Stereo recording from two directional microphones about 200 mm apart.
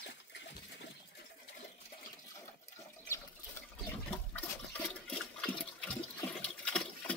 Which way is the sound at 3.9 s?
10° left (ahead or behind).